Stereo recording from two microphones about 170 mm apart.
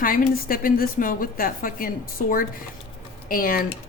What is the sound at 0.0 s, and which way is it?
A woman's voice, 55° left (ahead or behind).